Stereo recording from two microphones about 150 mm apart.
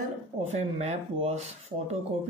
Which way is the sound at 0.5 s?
45° right (ahead or behind).